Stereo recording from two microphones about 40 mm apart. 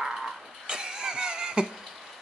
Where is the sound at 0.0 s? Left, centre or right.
Centre.